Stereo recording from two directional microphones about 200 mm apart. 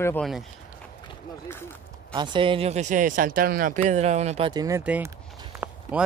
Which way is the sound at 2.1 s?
25° right (ahead or behind).